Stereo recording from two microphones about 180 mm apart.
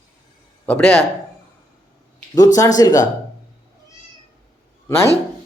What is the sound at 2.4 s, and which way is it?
Speech, 20° left (ahead or behind).